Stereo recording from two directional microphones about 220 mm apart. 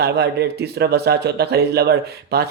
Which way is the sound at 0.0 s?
50° right (ahead or behind).